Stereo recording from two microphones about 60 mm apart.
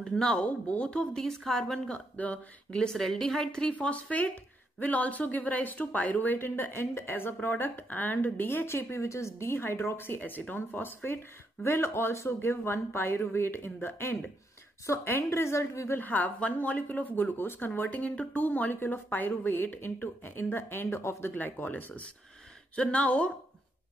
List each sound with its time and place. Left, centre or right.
0.0 s a woman's voice: centre
2.1 s speech: left
2.8 s a woman's voice: centre
3.7 s a woman's voice: left
16.0 s speech: left
21.3 s speech: left
22.8 s speech: centre